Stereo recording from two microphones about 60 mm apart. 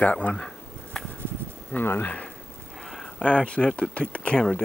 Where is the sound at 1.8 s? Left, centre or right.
Left.